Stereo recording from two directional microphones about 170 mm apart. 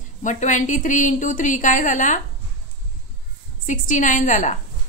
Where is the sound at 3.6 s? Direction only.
50° left (ahead or behind).